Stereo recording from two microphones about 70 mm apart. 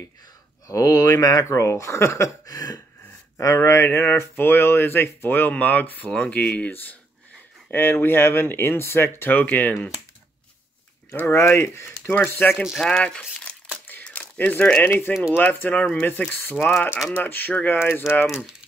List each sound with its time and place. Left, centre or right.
0.7 s speech: left
2.4 s a sound: left
3.3 s speech: left
11.2 s speech: left
12.2 s speech: left
12.8 s speech: centre
13.8 s crumpling: left
14.9 s speech: left
18.2 s speech: centre